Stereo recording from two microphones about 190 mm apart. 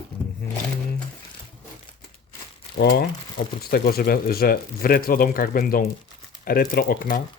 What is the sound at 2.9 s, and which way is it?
Speech, 60° left (ahead or behind).